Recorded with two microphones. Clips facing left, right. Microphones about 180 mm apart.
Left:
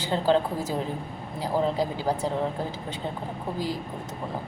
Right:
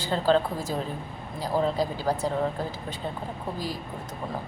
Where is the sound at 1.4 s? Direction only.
20° left (ahead or behind).